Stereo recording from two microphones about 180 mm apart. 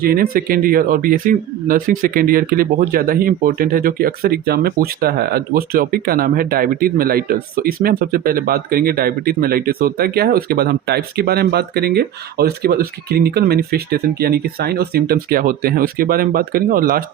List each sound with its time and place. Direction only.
0.0 s speech: 55° right (ahead or behind)